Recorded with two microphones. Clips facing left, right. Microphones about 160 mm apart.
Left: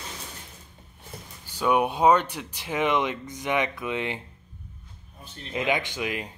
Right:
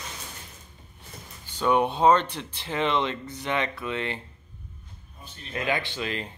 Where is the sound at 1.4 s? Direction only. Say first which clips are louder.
Even; 10° left (ahead or behind).